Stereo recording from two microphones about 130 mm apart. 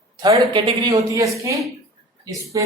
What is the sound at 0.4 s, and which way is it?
Speech, 50° right (ahead or behind).